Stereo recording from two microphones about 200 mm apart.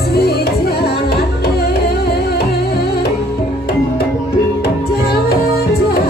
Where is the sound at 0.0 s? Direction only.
55° left (ahead or behind).